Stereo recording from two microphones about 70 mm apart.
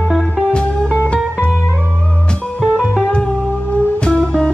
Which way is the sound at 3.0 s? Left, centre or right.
Centre.